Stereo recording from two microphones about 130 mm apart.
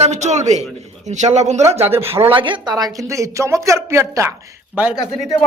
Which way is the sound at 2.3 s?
40° right (ahead or behind).